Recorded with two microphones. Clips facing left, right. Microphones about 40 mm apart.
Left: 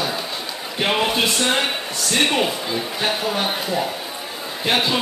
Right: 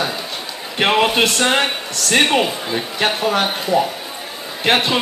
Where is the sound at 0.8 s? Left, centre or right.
Right.